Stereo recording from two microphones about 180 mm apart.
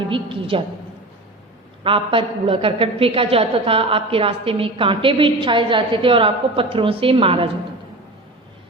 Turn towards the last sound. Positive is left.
turn(degrees=-30)  # may be behind; listen again after turning